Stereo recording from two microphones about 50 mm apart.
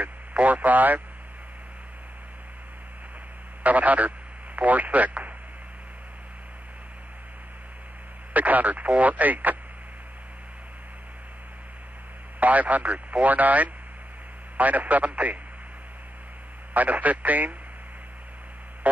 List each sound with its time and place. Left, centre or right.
0.0 s speech: right
3.6 s speech: right
8.3 s speech: right
12.4 s speech: right
16.7 s speech: right